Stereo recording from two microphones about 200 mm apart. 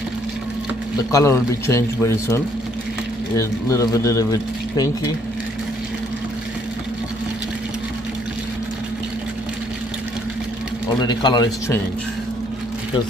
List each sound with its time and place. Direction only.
1.1 s speech: 15° left (ahead or behind)
11.0 s a man's voice: 20° left (ahead or behind)